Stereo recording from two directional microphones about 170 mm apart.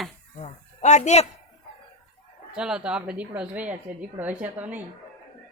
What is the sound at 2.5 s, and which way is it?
A woman's voice, 5° right (ahead or behind).